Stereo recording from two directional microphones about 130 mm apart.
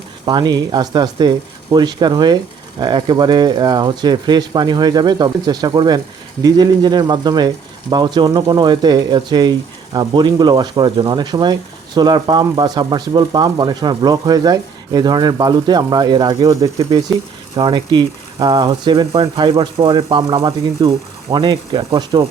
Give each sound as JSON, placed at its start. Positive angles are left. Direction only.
{"t": 0.3, "sound": "speech", "side_deg": -30}
{"t": 17.6, "sound": "speech", "side_deg": -35}